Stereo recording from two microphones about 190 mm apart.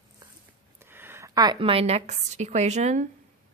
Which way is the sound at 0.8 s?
10° right (ahead or behind).